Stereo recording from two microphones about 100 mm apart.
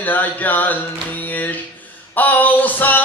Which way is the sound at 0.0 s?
20° left (ahead or behind).